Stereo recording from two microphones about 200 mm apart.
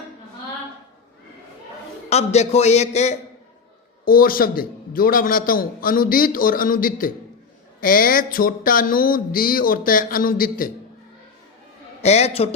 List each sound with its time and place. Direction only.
2.0 s a man's voice: 35° left (ahead or behind)
4.0 s a man's voice: 45° left (ahead or behind)
12.0 s a man's voice: 35° left (ahead or behind)